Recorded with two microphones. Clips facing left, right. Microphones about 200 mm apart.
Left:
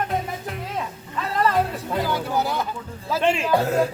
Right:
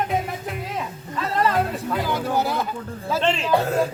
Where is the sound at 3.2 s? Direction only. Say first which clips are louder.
Left 1 dB; 10° left (ahead or behind).